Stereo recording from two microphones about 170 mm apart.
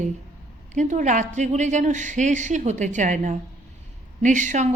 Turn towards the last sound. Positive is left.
turn(degrees=-45)  # may be behind; listen again after turning